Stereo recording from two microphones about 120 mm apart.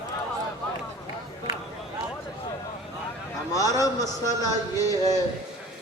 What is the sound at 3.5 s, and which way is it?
A man's voice, 30° left (ahead or behind).